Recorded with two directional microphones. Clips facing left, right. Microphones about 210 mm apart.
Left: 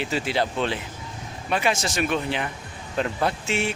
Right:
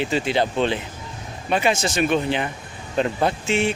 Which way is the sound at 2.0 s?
30° right (ahead or behind).